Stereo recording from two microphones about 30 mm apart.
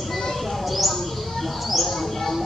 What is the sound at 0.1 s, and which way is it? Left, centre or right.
Mouse, centre.